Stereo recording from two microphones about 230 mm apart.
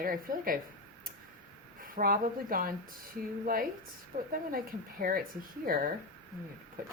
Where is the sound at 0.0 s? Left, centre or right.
Right.